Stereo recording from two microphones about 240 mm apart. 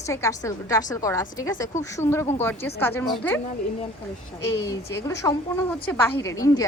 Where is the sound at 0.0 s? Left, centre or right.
Centre.